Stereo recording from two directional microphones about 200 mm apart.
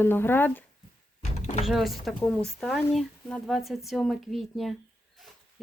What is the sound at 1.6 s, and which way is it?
Speech, centre (ahead or behind).